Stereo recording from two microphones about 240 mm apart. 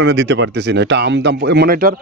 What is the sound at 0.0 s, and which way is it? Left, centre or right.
Speech, right.